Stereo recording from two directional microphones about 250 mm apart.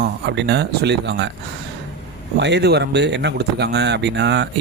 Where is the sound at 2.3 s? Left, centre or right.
Right.